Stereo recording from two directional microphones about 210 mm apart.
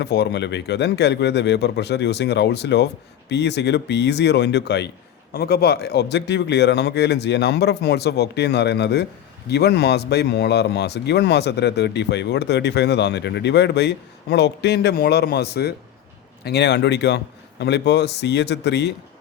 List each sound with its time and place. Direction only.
0.0 s a man's voice: 55° left (ahead or behind)